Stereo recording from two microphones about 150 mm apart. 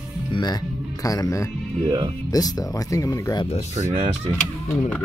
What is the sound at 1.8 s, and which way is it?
Music, 30° right (ahead or behind).